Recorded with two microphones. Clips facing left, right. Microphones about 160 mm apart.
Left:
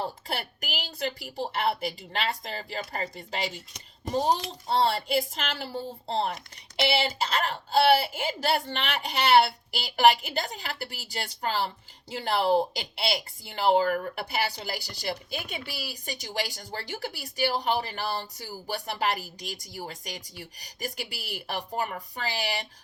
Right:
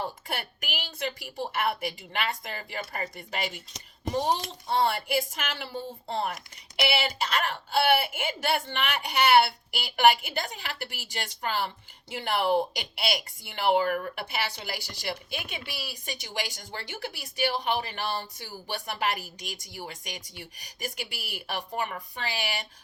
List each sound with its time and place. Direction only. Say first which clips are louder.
0.0 s speech: left 1 dB; 35° left (ahead or behind)
5.5 s speech: left 2 dB; 35° left (ahead or behind)